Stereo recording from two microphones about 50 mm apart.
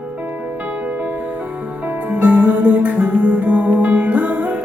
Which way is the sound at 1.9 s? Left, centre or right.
Right.